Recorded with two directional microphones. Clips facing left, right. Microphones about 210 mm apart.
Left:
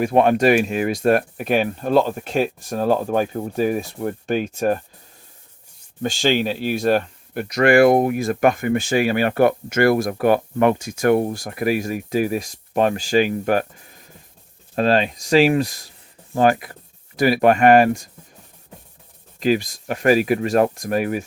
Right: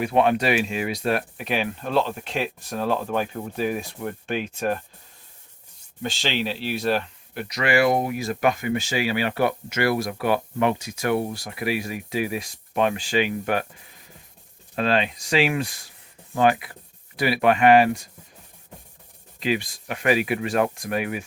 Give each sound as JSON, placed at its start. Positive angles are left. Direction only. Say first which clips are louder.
{"t": 0.0, "sound": "speech", "louder": "left 5 dB", "side_deg": 45}
{"t": 6.0, "sound": "speech", "louder": "left 7 dB", "side_deg": 45}
{"t": 14.8, "sound": "speech", "louder": "left 5 dB", "side_deg": 40}
{"t": 19.4, "sound": "speech", "louder": "left 6 dB", "side_deg": 40}